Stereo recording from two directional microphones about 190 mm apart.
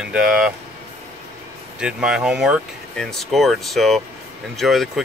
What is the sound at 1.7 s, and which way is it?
Speech, 5° right (ahead or behind).